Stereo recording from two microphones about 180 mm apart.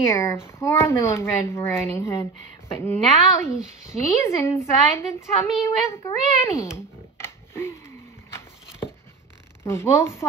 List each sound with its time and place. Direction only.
0.0 s a woman's voice: 15° left (ahead or behind)
7.2 s roaring cats: 15° left (ahead or behind)
9.7 s a woman's voice: 15° left (ahead or behind)